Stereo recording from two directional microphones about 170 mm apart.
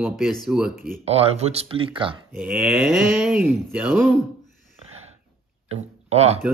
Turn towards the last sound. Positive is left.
turn(degrees=-35)  # may be behind; listen again after turning